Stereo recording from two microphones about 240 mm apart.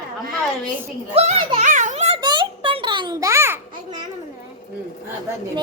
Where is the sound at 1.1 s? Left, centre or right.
Right; by 4.0 s centre.